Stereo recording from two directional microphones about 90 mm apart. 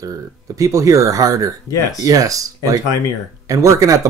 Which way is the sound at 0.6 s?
40° right (ahead or behind).